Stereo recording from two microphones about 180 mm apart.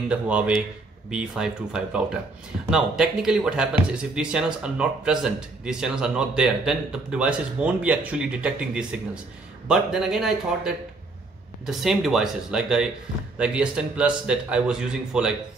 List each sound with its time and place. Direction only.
0.1 s speech: 5° right (ahead or behind)